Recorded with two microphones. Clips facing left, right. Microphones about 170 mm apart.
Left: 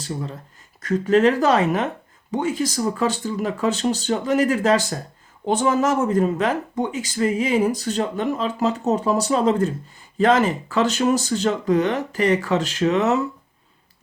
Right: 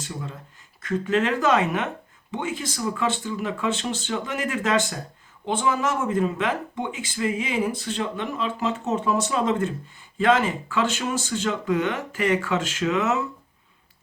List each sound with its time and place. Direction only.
0.0 s speech: 35° left (ahead or behind)